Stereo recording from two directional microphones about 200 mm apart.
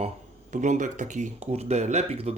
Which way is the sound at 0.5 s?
40° right (ahead or behind).